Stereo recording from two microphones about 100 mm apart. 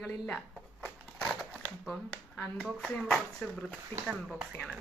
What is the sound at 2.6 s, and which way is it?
Speech, centre (ahead or behind).